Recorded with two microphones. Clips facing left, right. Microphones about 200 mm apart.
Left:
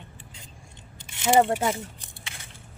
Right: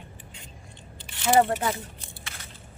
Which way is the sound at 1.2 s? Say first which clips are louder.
Left 1 dB; 15° left (ahead or behind).